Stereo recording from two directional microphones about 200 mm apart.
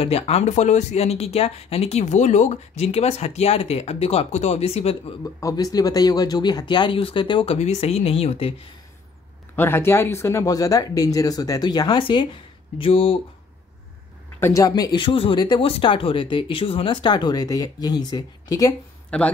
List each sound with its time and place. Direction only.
0.0 s speech: 30° left (ahead or behind)
5.2 s speech: 15° left (ahead or behind)
9.6 s speech: 10° left (ahead or behind); by 13.2 s 25° left (ahead or behind)
14.4 s speech: 15° left (ahead or behind)
19.0 s speech: 5° left (ahead or behind)